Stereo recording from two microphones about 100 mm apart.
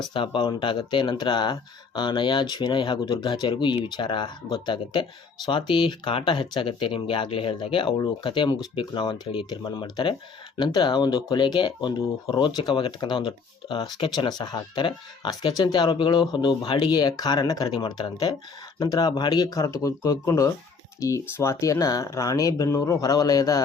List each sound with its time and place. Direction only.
0.0 s speech: 60° left (ahead or behind); by 23.6 s 40° left (ahead or behind)